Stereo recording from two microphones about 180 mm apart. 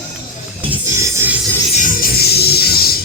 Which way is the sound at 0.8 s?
15° right (ahead or behind).